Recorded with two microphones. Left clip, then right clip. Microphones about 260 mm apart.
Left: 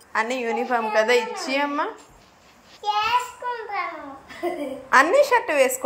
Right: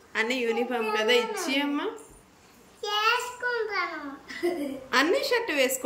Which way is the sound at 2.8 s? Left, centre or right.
Centre.